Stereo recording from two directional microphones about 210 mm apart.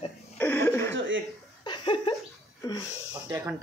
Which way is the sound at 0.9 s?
60° right (ahead or behind).